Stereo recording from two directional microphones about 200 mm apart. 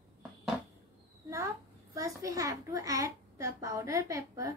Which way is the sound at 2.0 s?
15° right (ahead or behind).